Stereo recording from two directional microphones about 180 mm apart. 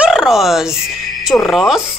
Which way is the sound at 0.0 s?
5° right (ahead or behind).